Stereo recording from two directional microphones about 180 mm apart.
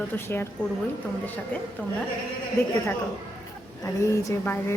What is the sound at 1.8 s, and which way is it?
Speech, 10° left (ahead or behind).